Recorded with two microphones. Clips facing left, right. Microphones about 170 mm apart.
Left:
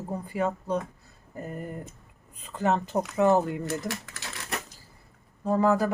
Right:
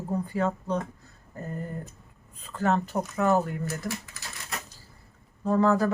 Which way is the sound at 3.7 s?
80° left.